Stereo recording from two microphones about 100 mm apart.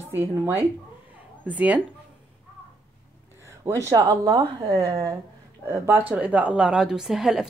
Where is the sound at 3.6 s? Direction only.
30° right (ahead or behind).